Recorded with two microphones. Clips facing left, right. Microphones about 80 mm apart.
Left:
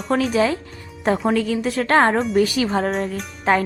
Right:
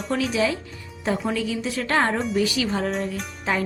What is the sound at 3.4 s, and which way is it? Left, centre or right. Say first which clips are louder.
Music: left 7 dB; left.